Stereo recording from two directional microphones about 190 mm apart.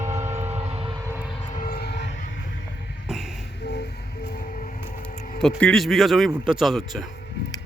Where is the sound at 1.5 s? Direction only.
50° left (ahead or behind).